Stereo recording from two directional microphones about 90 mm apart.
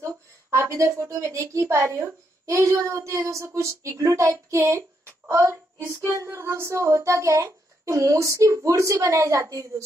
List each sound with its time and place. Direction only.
0.0 s a woman's voice: 30° right (ahead or behind)